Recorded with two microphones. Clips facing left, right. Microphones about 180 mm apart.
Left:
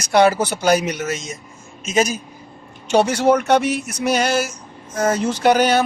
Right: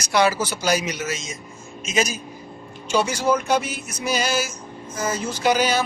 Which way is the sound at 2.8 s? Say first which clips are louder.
Left 6 dB; 65° left (ahead or behind).